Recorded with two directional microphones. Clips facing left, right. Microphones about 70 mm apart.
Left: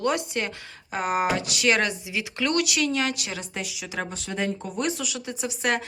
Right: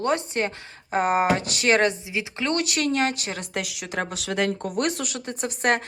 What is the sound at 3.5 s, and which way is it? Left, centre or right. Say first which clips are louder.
Speech: right 5 dB; right.